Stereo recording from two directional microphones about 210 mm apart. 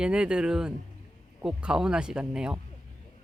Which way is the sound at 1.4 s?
5° right (ahead or behind).